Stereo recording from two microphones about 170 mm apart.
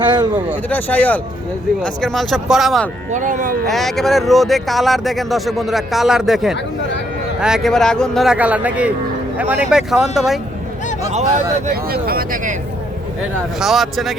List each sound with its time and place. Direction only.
0.0 s speech: 25° right (ahead or behind)
0.7 s speech: 10° left (ahead or behind)
3.1 s speech: 45° right (ahead or behind)
3.7 s speech: centre (ahead or behind)
11.1 s speech: 40° right (ahead or behind)
11.7 s speech: 65° right (ahead or behind)
13.6 s speech: centre (ahead or behind)